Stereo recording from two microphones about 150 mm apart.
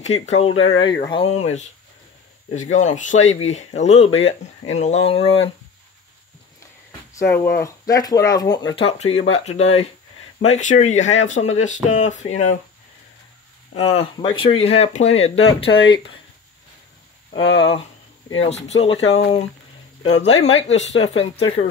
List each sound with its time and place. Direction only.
0.0 s speech: 45° left (ahead or behind)
7.2 s speech: 15° left (ahead or behind)
8.7 s speech: 45° left (ahead or behind)
13.7 s speech: 40° left (ahead or behind)
14.1 s speech: 30° left (ahead or behind)
17.3 s speech: 35° left (ahead or behind)